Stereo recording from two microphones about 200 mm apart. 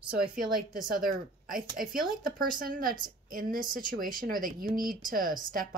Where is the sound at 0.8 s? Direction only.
45° right (ahead or behind).